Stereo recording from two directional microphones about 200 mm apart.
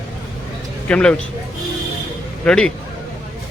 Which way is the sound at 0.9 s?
5° left (ahead or behind).